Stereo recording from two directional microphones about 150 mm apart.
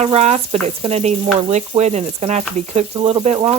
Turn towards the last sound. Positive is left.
turn(degrees=-40)  # may be behind; listen again after turning